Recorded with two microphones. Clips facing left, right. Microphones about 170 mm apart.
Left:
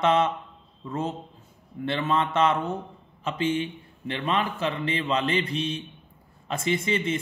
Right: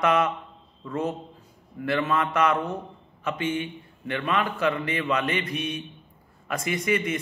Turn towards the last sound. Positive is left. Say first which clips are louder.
# even
turn(degrees=25)  # may be behind; listen again after turning